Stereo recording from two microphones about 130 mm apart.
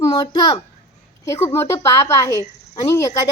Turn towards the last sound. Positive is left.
turn(degrees=25)  # may be behind; listen again after turning